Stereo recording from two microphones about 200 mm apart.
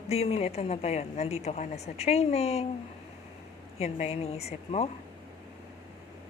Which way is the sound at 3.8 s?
30° left (ahead or behind).